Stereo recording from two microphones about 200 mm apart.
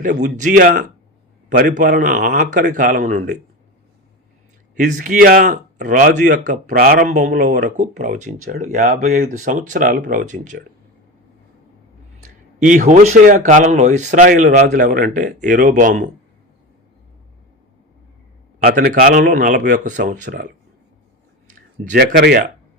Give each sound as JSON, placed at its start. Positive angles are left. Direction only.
{"t": 0.0, "sound": "speech", "side_deg": -40}
{"t": 4.8, "sound": "speech", "side_deg": -40}
{"t": 12.2, "sound": "speech", "side_deg": -40}
{"t": 18.6, "sound": "speech", "side_deg": -50}